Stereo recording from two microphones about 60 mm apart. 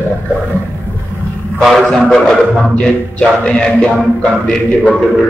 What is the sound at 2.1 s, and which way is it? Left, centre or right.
Music, centre.